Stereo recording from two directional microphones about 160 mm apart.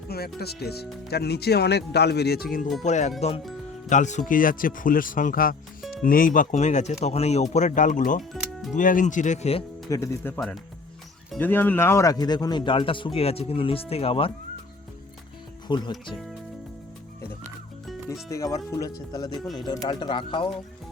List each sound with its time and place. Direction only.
0.1 s speech: 75° left (ahead or behind)
2.8 s speech: 45° left (ahead or behind)
3.8 s speech: 50° left (ahead or behind)
4.3 s speech: 60° left (ahead or behind)
8.2 s music: centre (ahead or behind)
8.7 s speech: 55° left (ahead or behind)
9.9 s speech: 15° left (ahead or behind); by 14.3 s 35° left (ahead or behind)
15.6 s speech: 25° left (ahead or behind)
18.3 s speech: 20° left (ahead or behind)